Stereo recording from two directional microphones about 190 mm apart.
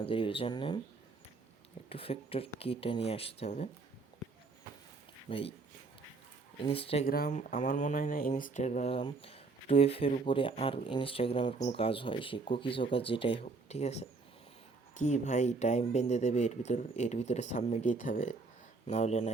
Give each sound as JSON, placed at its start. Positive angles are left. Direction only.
{"t": 0.0, "sound": "speech", "side_deg": 25}
{"t": 1.9, "sound": "speech", "side_deg": 30}
{"t": 5.3, "sound": "speech", "side_deg": 30}
{"t": 6.7, "sound": "speech", "side_deg": 30}
{"t": 7.0, "sound": "speech", "side_deg": 50}